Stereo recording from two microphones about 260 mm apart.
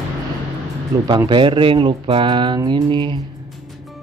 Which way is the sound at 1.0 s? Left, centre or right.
Centre.